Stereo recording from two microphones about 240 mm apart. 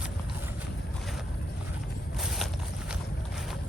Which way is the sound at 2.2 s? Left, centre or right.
Centre.